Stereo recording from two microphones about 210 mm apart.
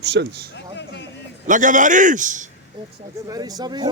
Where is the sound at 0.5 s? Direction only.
55° left (ahead or behind).